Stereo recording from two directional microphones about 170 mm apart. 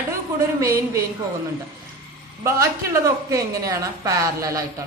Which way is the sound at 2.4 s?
15° right (ahead or behind).